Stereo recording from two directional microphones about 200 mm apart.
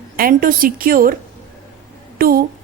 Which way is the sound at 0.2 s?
45° right (ahead or behind).